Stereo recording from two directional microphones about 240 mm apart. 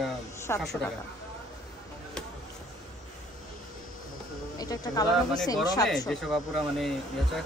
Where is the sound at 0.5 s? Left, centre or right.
Centre.